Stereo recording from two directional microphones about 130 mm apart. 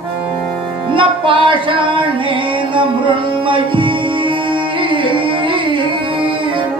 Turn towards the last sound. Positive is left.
turn(degrees=-40)  # may be behind; listen again after turning